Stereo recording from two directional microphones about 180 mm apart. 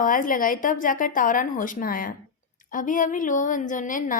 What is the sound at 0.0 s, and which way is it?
A woman's voice, 50° left (ahead or behind).